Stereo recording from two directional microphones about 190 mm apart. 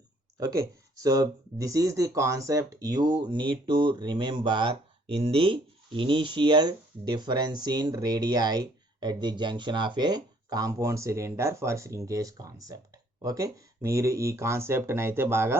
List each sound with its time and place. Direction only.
0.3 s speech: 15° right (ahead or behind)